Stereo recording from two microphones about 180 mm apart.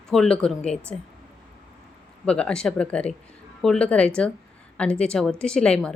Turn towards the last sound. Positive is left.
turn(degrees=5)  # may be behind; listen again after turning